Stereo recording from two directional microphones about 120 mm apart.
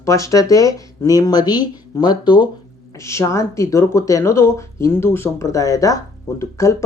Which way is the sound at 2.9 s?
25° left (ahead or behind).